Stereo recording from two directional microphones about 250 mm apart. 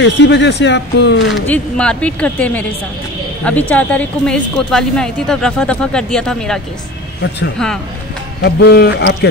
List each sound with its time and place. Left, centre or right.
0.0 s speech: left
1.3 s speech: centre
8.4 s a man's voice: left